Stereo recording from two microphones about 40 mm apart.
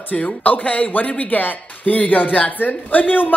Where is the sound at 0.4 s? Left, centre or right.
Left.